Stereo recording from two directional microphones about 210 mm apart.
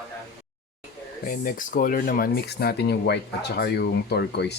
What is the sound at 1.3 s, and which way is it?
Speech, 40° left (ahead or behind).